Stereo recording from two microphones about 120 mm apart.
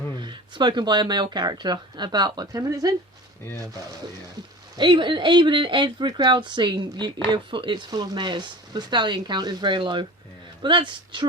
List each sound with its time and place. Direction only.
0.2 s speech: 40° right (ahead or behind)
4.8 s speech: 40° right (ahead or behind)